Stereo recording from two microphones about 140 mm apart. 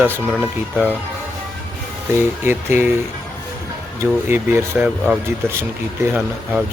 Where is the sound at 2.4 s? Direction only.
15° right (ahead or behind).